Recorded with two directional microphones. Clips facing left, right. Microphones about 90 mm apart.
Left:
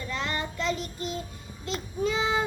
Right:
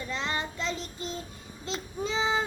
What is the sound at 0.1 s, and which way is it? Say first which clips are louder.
Child singing: left 1 dB; 25° right (ahead or behind).